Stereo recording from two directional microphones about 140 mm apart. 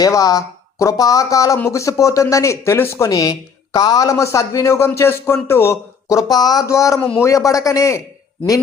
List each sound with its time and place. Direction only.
0.0 s speech: 25° left (ahead or behind)